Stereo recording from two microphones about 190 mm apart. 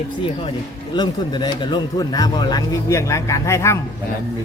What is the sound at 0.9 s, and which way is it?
Speech, 25° left (ahead or behind).